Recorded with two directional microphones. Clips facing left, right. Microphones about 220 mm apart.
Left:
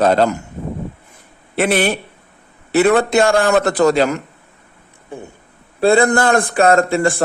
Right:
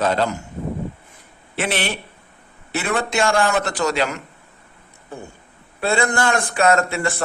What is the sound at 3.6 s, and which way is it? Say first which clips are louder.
Speech: left 9 dB; 55° left (ahead or behind).